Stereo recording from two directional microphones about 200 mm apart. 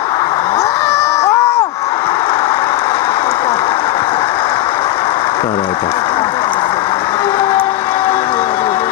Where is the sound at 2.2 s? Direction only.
25° left (ahead or behind).